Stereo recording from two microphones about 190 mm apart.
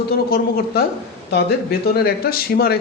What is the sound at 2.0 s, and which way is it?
Speech, 55° left (ahead or behind).